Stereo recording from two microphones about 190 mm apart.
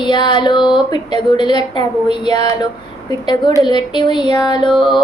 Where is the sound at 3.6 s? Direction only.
25° left (ahead or behind).